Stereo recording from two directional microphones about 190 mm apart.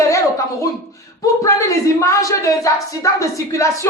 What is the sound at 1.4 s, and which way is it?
Speech, 15° left (ahead or behind).